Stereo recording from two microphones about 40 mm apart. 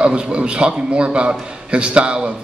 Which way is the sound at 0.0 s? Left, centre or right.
Right.